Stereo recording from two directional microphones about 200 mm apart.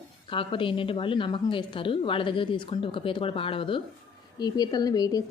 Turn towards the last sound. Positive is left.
turn(degrees=20)  # may be behind; listen again after turning